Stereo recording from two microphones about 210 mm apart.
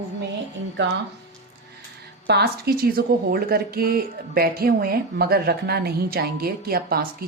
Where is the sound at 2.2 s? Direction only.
50° right (ahead or behind).